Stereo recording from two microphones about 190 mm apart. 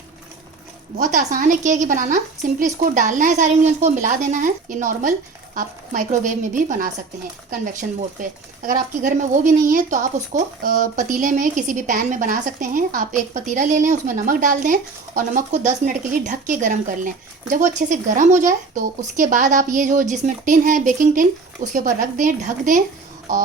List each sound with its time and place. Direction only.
0.9 s a woman's voice: 45° right (ahead or behind)